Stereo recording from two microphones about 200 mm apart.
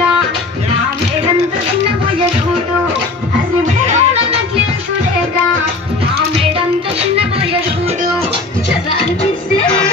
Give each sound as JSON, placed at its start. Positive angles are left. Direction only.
{"t": 3.8, "sound": "music", "side_deg": -35}